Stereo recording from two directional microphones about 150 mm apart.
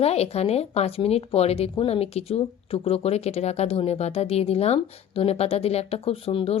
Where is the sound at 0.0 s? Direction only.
45° left (ahead or behind).